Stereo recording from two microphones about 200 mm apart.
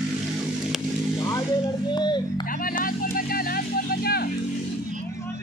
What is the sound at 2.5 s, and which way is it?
Speech, 45° left (ahead or behind).